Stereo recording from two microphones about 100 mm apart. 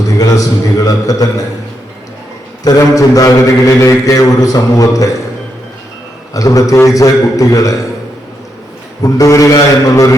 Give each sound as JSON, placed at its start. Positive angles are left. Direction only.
{"t": 0.2, "sound": "a man's voice", "side_deg": 35}
{"t": 2.6, "sound": "a man's voice", "side_deg": 35}
{"t": 6.3, "sound": "a man's voice", "side_deg": 35}
{"t": 9.0, "sound": "a man's voice", "side_deg": 35}